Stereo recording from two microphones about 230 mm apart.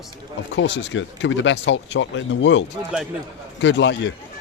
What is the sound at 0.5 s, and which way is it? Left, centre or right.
Speech, left.